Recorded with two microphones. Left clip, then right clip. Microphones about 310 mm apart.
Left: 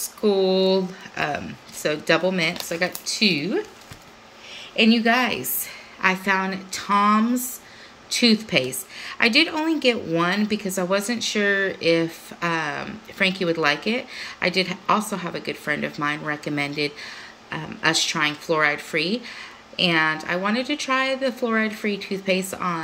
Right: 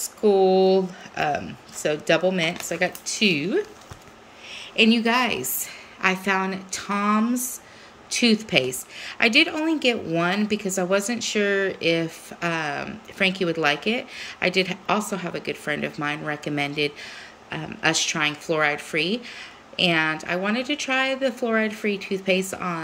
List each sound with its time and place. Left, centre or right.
0.2 s a woman's voice: centre
4.7 s a woman's voice: centre